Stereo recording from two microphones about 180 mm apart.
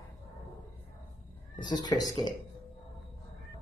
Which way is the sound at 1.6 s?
25° left (ahead or behind).